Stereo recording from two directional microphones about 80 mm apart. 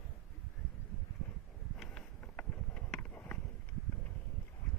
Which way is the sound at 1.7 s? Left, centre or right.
Centre.